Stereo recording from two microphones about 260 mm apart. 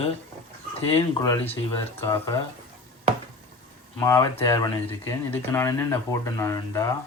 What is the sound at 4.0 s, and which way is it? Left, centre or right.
Speech, centre.